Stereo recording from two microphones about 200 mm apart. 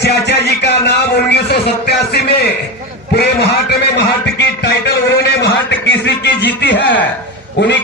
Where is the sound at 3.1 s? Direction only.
55° left (ahead or behind).